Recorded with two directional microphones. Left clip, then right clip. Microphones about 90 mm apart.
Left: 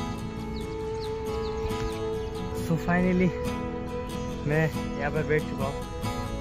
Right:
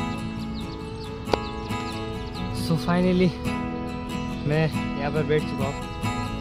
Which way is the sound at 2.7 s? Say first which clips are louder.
Right 3 dB; 35° right (ahead or behind).